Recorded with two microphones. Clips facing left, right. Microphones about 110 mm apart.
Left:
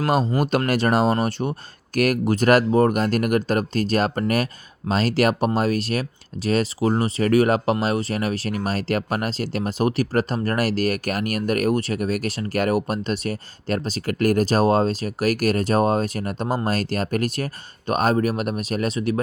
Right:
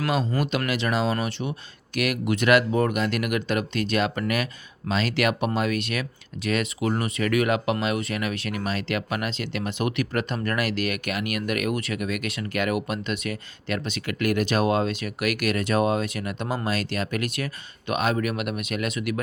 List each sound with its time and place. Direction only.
0.0 s speech: 45° left (ahead or behind)